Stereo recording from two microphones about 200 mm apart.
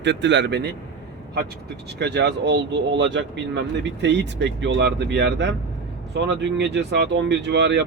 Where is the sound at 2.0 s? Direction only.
60° right (ahead or behind).